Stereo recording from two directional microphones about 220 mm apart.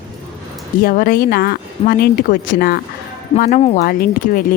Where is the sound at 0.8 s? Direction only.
40° left (ahead or behind).